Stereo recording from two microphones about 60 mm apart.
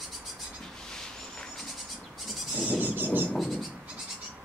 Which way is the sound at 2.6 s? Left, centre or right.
Right.